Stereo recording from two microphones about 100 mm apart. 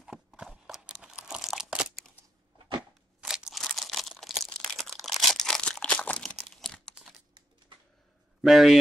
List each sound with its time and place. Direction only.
0.0 s crunch: 5° right (ahead or behind)
3.2 s crunch: 5° right (ahead or behind)
8.4 s speech: centre (ahead or behind)